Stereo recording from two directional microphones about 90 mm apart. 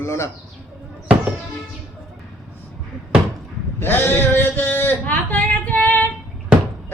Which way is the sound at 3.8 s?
25° left (ahead or behind).